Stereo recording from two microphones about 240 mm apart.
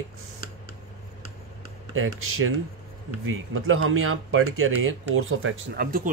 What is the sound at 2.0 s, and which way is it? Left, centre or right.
Speech, right.